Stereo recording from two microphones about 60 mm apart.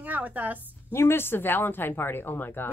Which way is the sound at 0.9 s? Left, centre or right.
Left.